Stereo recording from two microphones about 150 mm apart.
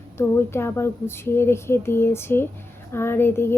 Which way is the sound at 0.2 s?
15° left (ahead or behind).